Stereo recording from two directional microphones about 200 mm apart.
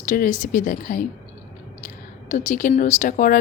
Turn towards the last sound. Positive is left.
turn(degrees=40)  # may be behind; listen again after turning